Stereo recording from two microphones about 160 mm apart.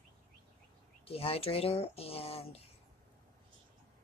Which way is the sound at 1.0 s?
35° left (ahead or behind).